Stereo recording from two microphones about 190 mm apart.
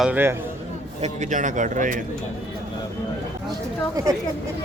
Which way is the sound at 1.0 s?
40° right (ahead or behind).